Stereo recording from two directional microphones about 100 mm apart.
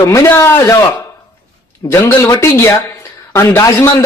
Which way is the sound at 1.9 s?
30° left (ahead or behind).